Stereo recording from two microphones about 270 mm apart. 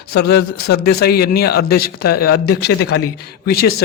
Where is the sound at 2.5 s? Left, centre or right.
Left.